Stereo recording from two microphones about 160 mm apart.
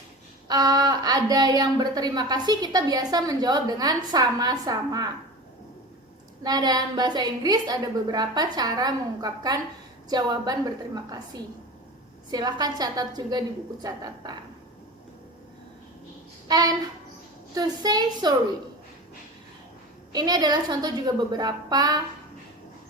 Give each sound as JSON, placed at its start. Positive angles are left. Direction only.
{"t": 0.4, "sound": "a woman's voice", "side_deg": -25}
{"t": 6.4, "sound": "a woman's voice", "side_deg": -25}
{"t": 12.3, "sound": "a woman's voice", "side_deg": -25}
{"t": 16.5, "sound": "a woman's voice", "side_deg": -25}
{"t": 20.1, "sound": "a woman's voice", "side_deg": -25}